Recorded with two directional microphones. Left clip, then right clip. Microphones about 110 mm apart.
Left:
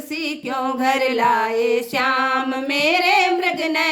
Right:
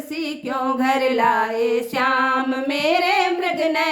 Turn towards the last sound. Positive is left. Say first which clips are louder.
# even
turn(degrees=35)  # may be behind; listen again after turning